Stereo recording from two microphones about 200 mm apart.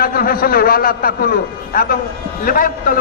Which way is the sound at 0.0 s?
45° left (ahead or behind).